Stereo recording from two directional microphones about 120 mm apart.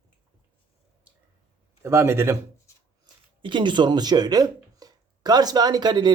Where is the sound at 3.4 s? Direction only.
40° right (ahead or behind).